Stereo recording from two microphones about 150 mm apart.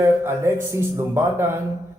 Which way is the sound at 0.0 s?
15° right (ahead or behind).